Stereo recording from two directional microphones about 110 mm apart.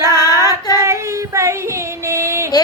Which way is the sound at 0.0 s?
35° left (ahead or behind).